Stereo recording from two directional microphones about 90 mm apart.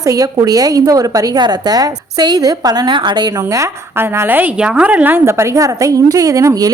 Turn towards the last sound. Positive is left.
turn(degrees=-35)  # may be behind; listen again after turning